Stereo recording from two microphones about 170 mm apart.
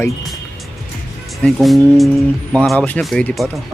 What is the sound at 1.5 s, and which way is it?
Speech, centre (ahead or behind).